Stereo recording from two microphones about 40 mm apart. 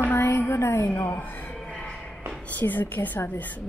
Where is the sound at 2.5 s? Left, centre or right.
Left.